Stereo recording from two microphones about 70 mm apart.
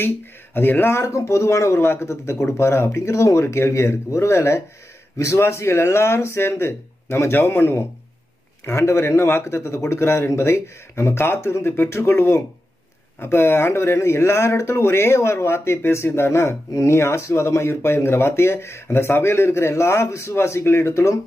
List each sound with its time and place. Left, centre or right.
0.6 s speech: left